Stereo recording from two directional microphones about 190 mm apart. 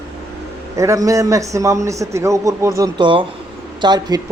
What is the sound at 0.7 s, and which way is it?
A man's voice, 15° right (ahead or behind).